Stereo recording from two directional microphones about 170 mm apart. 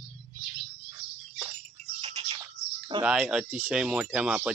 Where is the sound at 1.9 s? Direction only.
25° right (ahead or behind).